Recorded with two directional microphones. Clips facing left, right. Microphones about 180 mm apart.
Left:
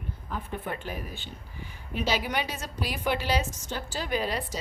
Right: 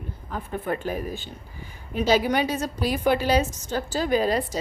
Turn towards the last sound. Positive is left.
turn(degrees=-40)  # may be behind; listen again after turning